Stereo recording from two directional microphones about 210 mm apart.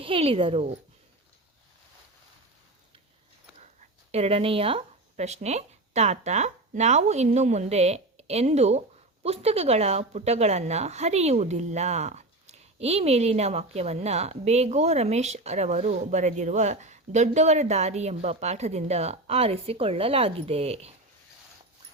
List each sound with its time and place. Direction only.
0.0 s speech: 25° right (ahead or behind)
4.1 s a woman's voice: 30° right (ahead or behind)